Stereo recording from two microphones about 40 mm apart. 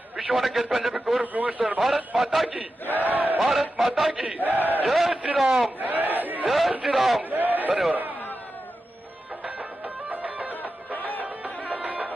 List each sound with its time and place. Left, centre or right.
0.2 s a man's voice: centre
1.2 s a man's voice: right
2.1 s a man's voice: centre
2.9 s speech: right
3.4 s a man's voice: centre
4.1 s chant: centre
4.4 s speech: right
4.9 s a man's voice: centre
5.1 s a man's voice: right
5.4 s a man's voice: centre
5.8 s crowd: right
6.5 s a man's voice: centre
7.2 s a sound: right
9.4 s music: right